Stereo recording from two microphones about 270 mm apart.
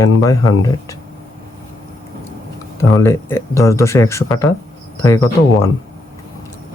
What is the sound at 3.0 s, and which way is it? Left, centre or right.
A man's voice, centre.